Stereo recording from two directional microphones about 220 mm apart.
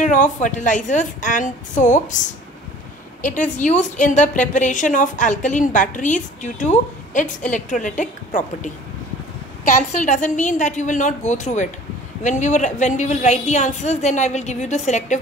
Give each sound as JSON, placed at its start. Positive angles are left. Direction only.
{"t": 0.0, "sound": "a woman's voice", "side_deg": 35}
{"t": 9.9, "sound": "a woman's voice", "side_deg": 35}